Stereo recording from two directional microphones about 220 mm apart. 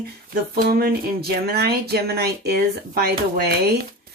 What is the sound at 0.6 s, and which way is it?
Speech, 45° right (ahead or behind).